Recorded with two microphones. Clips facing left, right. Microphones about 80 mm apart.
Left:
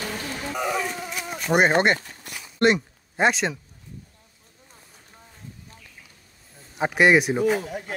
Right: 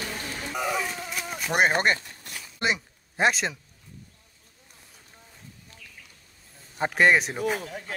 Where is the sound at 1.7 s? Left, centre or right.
Left.